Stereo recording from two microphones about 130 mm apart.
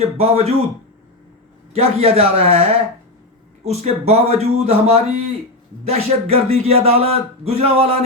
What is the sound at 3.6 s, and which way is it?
Speech, 55° right (ahead or behind).